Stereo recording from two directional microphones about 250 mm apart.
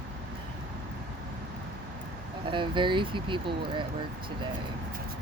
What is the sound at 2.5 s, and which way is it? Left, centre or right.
Speech, centre.